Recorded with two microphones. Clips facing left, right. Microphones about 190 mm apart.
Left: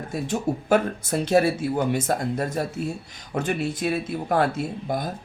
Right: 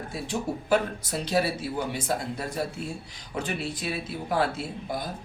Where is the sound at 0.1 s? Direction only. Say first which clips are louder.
Left 6 dB; 50° left (ahead or behind).